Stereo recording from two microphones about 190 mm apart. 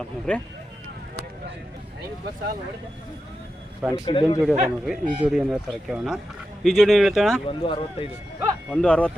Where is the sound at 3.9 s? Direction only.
25° left (ahead or behind).